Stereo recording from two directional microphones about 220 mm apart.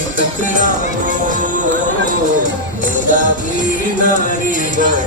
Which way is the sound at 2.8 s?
35° left (ahead or behind).